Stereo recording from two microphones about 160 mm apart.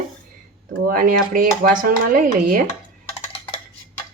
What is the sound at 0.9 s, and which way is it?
Speech, 60° right (ahead or behind).